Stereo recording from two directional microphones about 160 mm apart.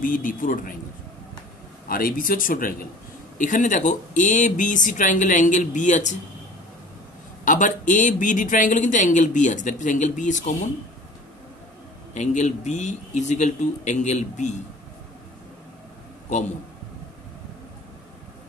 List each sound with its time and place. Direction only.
0.0 s a man's voice: 60° left (ahead or behind)
1.9 s a man's voice: 60° left (ahead or behind)
7.4 s speech: 55° left (ahead or behind)
12.1 s speech: 50° left (ahead or behind)